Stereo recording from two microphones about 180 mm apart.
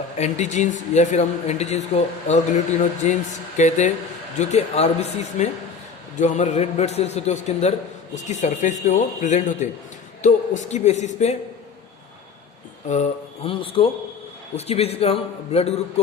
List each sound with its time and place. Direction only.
0.2 s speech: 40° left (ahead or behind)
12.9 s speech: 40° left (ahead or behind)
13.5 s a man's voice: 30° left (ahead or behind)